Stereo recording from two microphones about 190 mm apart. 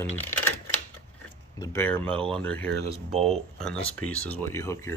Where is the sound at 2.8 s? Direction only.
35° right (ahead or behind).